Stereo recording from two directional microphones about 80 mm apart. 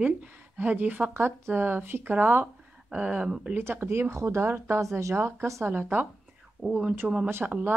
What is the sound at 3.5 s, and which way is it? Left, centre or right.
Speech, right.